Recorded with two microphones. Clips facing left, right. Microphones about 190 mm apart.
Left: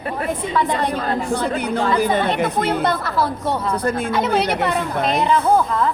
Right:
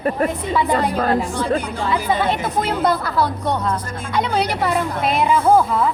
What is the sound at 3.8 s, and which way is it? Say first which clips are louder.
Speech: left 9 dB; 60° left (ahead or behind).